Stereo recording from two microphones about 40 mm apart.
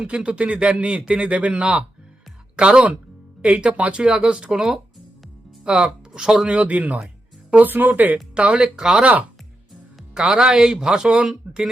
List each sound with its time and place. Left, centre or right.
0.0 s speech: right
2.6 s speech: right
5.8 s speech: centre
6.5 s speech: right
7.5 s speech: right
8.4 s speech: right
10.2 s speech: centre